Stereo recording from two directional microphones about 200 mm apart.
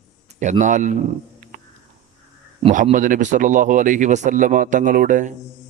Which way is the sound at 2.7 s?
40° right (ahead or behind).